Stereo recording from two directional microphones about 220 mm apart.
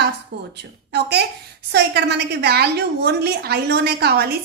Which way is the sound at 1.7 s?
50° right (ahead or behind).